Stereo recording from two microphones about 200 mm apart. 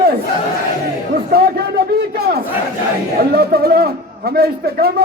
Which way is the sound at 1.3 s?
50° right (ahead or behind).